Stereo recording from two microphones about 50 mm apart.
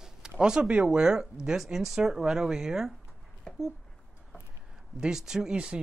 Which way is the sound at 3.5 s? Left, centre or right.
Centre.